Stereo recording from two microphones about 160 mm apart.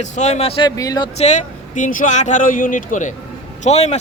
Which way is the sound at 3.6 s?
45° left (ahead or behind).